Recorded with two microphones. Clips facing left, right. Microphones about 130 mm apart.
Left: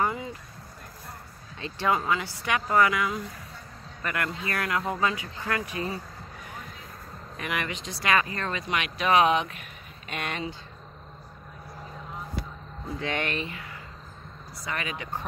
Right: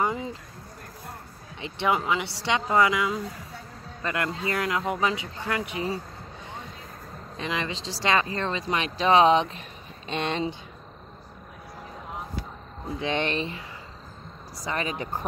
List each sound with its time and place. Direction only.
0.0 s a sound: 25° right (ahead or behind)
1.6 s speech: 20° right (ahead or behind)
6.4 s music: 25° right (ahead or behind)
7.3 s speech: 25° right (ahead or behind)
13.0 s speech: 25° right (ahead or behind)